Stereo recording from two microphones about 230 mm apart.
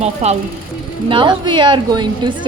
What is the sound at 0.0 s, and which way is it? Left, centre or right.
A woman's voice, right.